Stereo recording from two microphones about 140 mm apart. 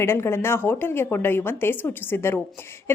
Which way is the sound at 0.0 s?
20° left (ahead or behind).